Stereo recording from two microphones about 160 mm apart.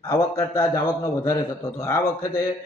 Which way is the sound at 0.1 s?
20° left (ahead or behind).